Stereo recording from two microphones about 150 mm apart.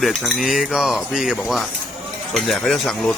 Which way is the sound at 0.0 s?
Centre (ahead or behind).